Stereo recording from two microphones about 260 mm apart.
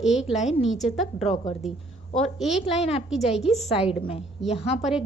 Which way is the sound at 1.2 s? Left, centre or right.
Left.